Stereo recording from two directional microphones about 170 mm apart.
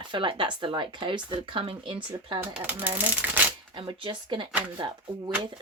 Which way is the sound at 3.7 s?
30° right (ahead or behind).